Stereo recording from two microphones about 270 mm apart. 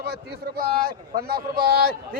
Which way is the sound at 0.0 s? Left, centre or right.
Right.